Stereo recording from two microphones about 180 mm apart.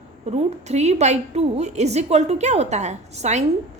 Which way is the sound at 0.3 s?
40° right (ahead or behind).